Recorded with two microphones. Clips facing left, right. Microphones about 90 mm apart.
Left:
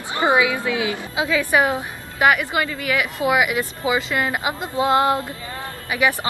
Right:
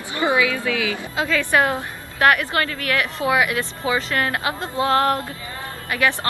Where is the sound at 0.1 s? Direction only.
20° left (ahead or behind).